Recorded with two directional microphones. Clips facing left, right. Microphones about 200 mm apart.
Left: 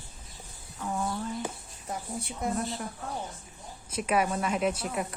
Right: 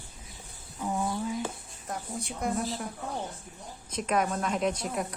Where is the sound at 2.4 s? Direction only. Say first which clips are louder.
Right 1 dB; centre (ahead or behind).